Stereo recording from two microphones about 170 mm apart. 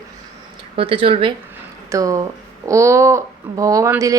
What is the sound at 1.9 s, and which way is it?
Speech, 20° right (ahead or behind).